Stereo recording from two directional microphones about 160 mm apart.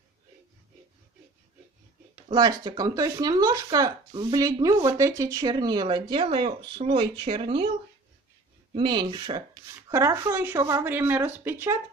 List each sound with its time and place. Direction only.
2.3 s speech: 25° right (ahead or behind)
8.7 s speech: 30° right (ahead or behind)